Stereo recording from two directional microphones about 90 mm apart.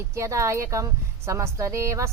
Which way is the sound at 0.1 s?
35° right (ahead or behind).